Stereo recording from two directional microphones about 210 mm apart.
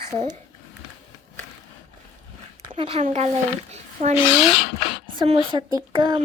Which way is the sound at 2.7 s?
25° right (ahead or behind).